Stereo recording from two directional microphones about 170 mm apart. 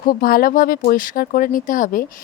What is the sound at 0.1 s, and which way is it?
Speech, 60° left (ahead or behind).